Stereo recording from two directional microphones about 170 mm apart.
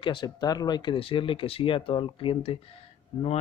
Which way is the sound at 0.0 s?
25° left (ahead or behind).